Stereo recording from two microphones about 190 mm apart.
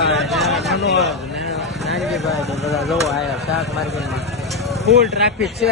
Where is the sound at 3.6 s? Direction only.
Centre (ahead or behind).